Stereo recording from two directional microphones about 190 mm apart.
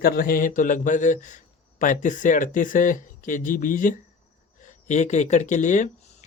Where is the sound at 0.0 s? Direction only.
50° left (ahead or behind).